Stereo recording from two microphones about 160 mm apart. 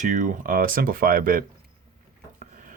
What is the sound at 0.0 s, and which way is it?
Speech, 50° right (ahead or behind).